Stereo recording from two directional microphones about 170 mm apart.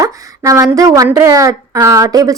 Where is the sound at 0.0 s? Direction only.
20° right (ahead or behind).